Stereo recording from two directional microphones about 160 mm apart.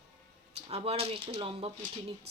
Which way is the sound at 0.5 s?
40° right (ahead or behind).